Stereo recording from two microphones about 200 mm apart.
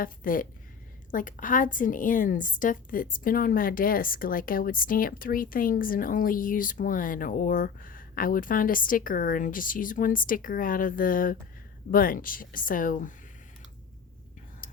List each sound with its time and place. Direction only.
0.0 s a woman's voice: 45° left (ahead or behind)
14.6 s whispering: 40° left (ahead or behind)